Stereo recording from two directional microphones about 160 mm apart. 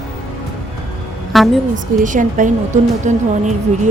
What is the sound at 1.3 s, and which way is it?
Speech, centre (ahead or behind).